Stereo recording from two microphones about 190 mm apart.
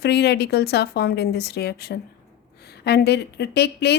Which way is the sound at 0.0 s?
60° left (ahead or behind).